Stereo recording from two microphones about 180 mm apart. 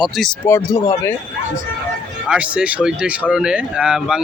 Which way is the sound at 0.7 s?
20° left (ahead or behind).